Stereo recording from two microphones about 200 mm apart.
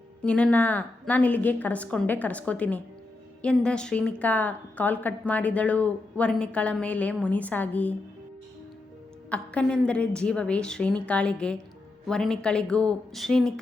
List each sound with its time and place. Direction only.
0.2 s a woman's voice: 5° left (ahead or behind)
9.3 s a woman's voice: 5° left (ahead or behind)